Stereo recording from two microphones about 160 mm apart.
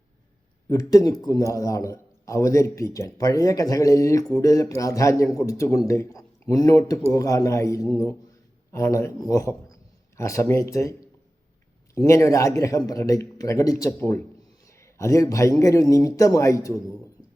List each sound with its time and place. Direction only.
0.7 s speech: 20° left (ahead or behind)